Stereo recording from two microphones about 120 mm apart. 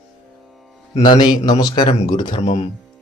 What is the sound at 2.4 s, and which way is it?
Speech, 70° left (ahead or behind).